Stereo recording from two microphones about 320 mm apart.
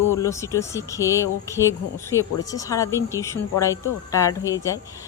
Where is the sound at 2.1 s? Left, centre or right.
Centre.